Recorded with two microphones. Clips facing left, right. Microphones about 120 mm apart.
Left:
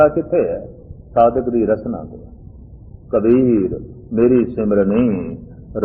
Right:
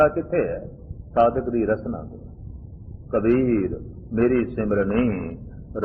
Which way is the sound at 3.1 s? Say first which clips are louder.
Left 7 dB; 30° left (ahead or behind).